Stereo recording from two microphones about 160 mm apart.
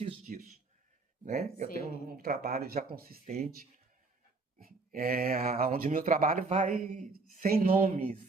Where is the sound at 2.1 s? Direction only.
75° right (ahead or behind).